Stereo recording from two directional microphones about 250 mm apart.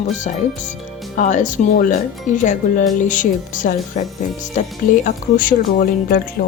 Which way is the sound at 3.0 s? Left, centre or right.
Left.